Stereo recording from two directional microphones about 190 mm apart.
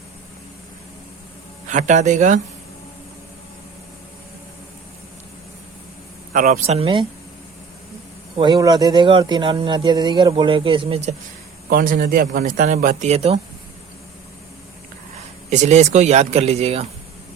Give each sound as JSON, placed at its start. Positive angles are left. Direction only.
{"t": 1.6, "sound": "speech", "side_deg": -40}
{"t": 6.3, "sound": "a man's voice", "side_deg": -45}
{"t": 6.7, "sound": "speech", "side_deg": -25}
{"t": 8.4, "sound": "speech", "side_deg": -25}
{"t": 11.7, "sound": "a man's voice", "side_deg": -50}
{"t": 15.4, "sound": "speech", "side_deg": -35}